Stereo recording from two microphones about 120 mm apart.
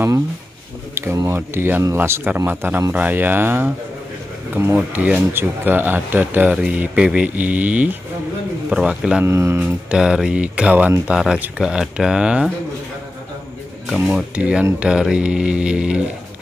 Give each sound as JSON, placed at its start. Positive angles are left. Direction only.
{"t": 0.9, "sound": "speech", "side_deg": -25}
{"t": 9.2, "sound": "speech", "side_deg": -20}
{"t": 9.6, "sound": "speech", "side_deg": -10}
{"t": 13.8, "sound": "speech", "side_deg": -5}